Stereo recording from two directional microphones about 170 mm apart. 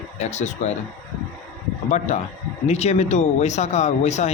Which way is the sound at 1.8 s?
45° left (ahead or behind).